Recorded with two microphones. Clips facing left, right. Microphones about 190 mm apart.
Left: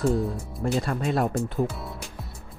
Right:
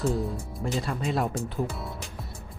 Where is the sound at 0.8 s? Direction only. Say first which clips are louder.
Left 3 dB; 55° left (ahead or behind).